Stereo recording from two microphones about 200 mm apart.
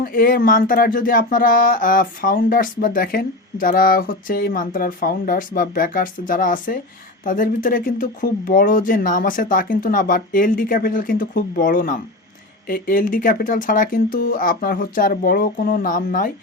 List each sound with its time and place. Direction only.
0.0 s speech: 45° left (ahead or behind)